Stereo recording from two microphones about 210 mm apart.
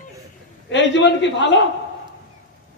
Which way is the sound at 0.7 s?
55° left (ahead or behind).